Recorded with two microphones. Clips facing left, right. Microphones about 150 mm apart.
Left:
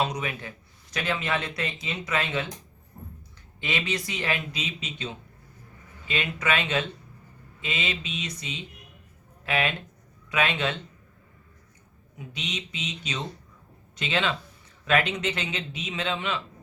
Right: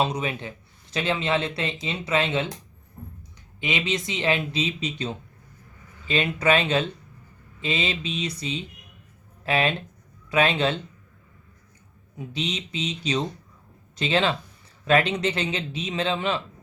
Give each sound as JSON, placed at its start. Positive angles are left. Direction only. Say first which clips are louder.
{"t": 0.0, "sound": "a man's voice", "louder": "right 3 dB", "side_deg": -25}
{"t": 3.6, "sound": "a man's voice", "louder": "right 3 dB", "side_deg": -20}
{"t": 6.1, "sound": "a man's voice", "louder": "right 6 dB", "side_deg": -30}
{"t": 12.3, "sound": "a man's voice", "louder": "right 6 dB", "side_deg": -30}